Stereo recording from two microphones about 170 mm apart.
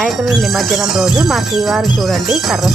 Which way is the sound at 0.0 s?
Centre (ahead or behind).